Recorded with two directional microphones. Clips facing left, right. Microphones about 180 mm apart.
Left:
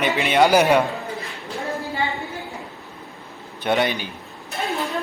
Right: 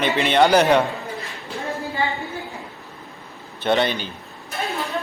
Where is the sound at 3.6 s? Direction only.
15° left (ahead or behind).